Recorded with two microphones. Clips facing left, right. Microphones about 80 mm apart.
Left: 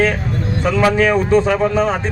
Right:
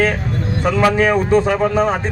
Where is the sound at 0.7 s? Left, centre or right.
Centre.